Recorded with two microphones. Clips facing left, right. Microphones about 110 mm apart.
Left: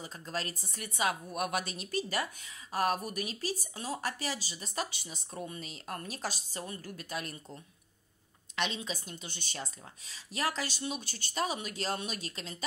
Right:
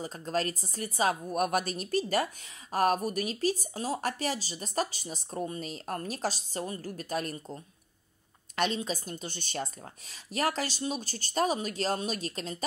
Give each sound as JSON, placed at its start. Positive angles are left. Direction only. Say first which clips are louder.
{"t": 0.0, "sound": "a woman's voice", "louder": "right 7 dB", "side_deg": -40}